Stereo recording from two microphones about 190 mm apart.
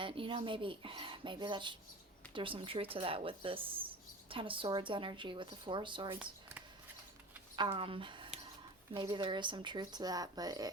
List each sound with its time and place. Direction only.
0.0 s speech: 25° right (ahead or behind)
7.5 s speech: 25° right (ahead or behind)